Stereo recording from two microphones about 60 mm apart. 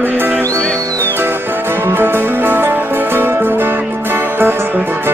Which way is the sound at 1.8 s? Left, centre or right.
Right.